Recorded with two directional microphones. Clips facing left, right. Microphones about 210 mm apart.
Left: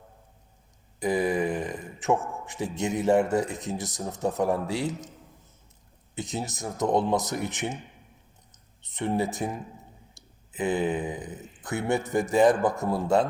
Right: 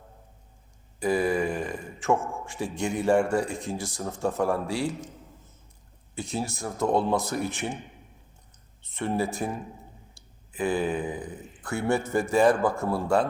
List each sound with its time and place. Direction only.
0.9 s speech: 20° left (ahead or behind)
6.1 s speech: 20° left (ahead or behind)